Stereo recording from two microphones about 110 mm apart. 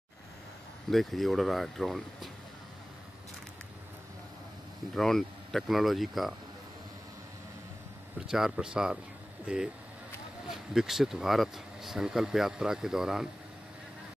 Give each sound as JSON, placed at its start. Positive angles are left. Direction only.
{"t": 0.8, "sound": "speech", "side_deg": 0}
{"t": 4.9, "sound": "speech", "side_deg": 5}
{"t": 8.3, "sound": "speech", "side_deg": -5}